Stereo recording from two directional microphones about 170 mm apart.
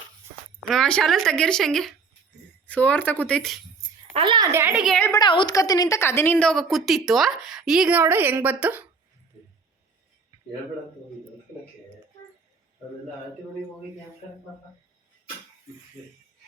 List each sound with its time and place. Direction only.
0.7 s a woman's voice: 5° left (ahead or behind)
4.1 s speech: 30° right (ahead or behind)
4.5 s speech: 10° right (ahead or behind)
4.8 s a woman's voice: centre (ahead or behind)
5.0 s a woman's voice: 25° left (ahead or behind); by 8.9 s 10° right (ahead or behind)